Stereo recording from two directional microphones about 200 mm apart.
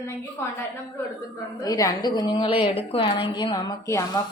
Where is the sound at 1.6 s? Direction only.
20° left (ahead or behind).